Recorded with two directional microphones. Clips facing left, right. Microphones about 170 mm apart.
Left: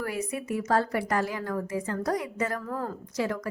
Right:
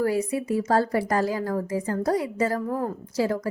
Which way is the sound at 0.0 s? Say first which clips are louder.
Right 8 dB; 30° right (ahead or behind).